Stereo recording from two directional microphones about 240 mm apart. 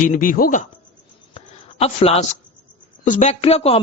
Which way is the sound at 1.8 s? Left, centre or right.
Left.